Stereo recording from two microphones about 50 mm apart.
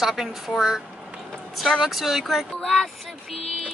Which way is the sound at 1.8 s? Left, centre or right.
Centre.